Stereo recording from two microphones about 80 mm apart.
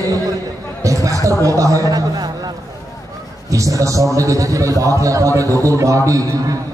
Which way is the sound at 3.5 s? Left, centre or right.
Right.